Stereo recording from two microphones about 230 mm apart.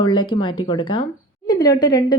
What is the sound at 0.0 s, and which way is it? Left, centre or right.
A woman's voice, centre.